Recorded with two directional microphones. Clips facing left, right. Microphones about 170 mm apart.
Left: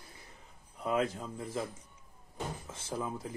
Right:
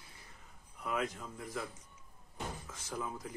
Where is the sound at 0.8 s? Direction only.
30° left (ahead or behind).